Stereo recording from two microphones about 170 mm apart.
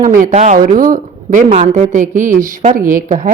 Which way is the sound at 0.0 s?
50° right (ahead or behind).